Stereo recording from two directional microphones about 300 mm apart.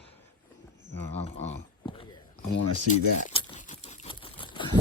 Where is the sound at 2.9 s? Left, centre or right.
Left.